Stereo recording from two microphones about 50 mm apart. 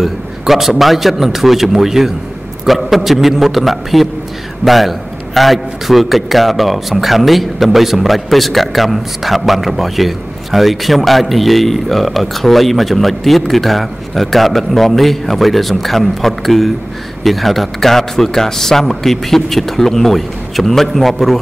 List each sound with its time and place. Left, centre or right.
0.0 s a man's voice: centre